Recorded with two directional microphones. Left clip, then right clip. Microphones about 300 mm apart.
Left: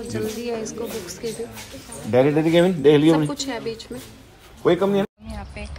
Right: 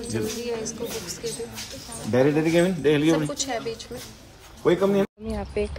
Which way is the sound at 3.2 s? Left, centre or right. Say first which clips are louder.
Left 1 dB; centre.